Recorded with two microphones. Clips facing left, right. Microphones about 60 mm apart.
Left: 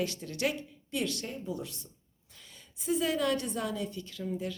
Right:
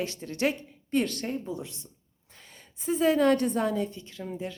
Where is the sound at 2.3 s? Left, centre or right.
Right.